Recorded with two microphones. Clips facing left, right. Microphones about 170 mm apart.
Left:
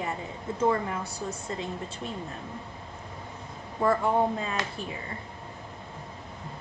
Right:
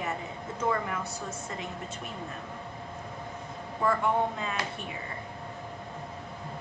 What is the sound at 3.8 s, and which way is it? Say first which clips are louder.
A woman's voice: left 3 dB; 35° left (ahead or behind).